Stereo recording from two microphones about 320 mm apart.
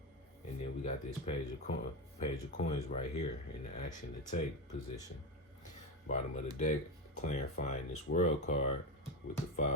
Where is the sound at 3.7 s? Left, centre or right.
Left.